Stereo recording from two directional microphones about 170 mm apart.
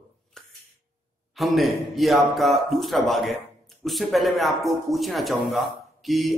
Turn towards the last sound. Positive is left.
turn(degrees=0)  # may be behind; listen again after turning